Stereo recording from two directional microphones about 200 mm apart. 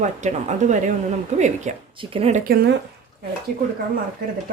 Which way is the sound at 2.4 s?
50° right (ahead or behind).